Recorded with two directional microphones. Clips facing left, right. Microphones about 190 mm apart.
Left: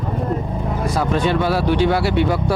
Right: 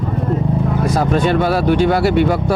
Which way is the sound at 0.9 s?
45° right (ahead or behind).